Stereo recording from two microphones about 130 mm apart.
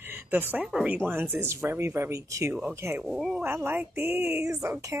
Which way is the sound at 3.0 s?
5° right (ahead or behind).